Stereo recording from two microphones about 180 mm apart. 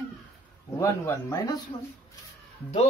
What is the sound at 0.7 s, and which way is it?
Speech, 20° left (ahead or behind).